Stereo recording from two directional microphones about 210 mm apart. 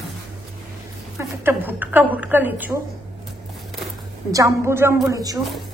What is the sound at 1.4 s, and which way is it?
A woman's voice, 10° right (ahead or behind).